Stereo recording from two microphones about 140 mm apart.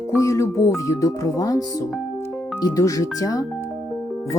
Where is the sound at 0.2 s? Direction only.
20° left (ahead or behind).